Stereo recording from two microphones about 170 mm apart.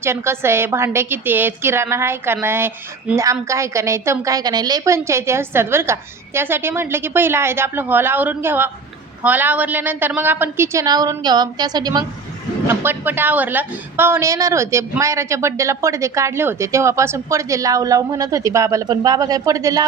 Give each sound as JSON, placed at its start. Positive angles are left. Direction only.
{"t": 0.0, "sound": "a woman's voice", "side_deg": -15}
{"t": 12.6, "sound": "a woman's voice", "side_deg": -15}